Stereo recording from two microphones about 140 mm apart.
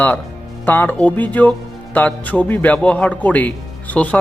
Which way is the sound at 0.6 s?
15° left (ahead or behind).